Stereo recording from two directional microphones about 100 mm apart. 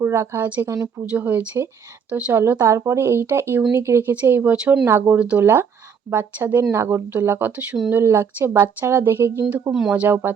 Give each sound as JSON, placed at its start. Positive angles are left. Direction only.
{"t": 0.0, "sound": "a woman's voice", "side_deg": -25}
{"t": 0.7, "sound": "speech", "side_deg": -30}
{"t": 1.1, "sound": "speech", "side_deg": -15}
{"t": 2.3, "sound": "speech", "side_deg": -25}
{"t": 4.9, "sound": "speech", "side_deg": -25}